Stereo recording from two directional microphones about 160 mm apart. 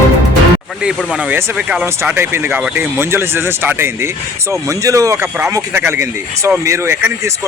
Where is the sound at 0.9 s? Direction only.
10° right (ahead or behind).